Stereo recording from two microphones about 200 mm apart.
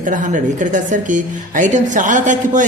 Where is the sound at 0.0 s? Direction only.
40° right (ahead or behind).